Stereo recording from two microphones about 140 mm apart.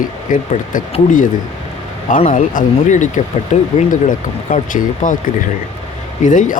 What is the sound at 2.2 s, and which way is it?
Speech, 65° left (ahead or behind).